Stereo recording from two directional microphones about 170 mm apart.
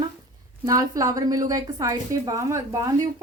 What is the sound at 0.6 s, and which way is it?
A woman's voice, 20° right (ahead or behind).